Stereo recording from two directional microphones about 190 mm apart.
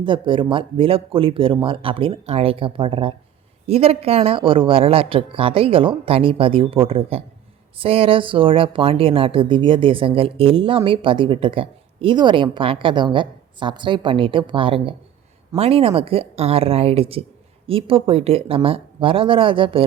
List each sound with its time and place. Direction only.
0.0 s speech: 25° right (ahead or behind)